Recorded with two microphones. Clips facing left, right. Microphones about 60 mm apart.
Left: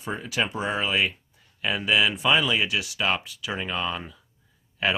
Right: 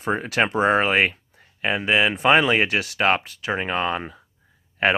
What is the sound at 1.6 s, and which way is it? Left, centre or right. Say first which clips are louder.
Speech: right 3 dB; right.